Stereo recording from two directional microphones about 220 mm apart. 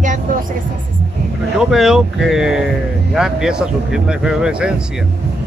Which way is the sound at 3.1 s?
5° right (ahead or behind).